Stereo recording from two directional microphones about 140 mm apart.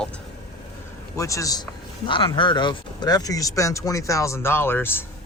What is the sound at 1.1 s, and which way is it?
Speech, 25° left (ahead or behind).